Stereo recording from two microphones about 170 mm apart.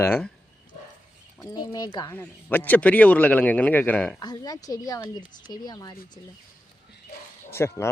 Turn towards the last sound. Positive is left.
turn(degrees=15)  # may be behind; listen again after turning